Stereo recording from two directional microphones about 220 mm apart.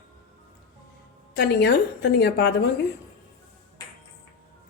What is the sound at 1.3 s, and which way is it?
A woman's voice, 50° left (ahead or behind).